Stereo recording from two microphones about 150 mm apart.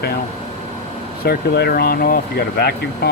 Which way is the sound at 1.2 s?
90° left.